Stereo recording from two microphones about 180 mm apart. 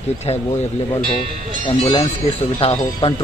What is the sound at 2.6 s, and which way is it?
Speech, 30° left (ahead or behind).